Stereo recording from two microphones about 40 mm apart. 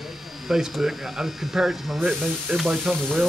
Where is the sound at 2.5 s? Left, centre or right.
Right.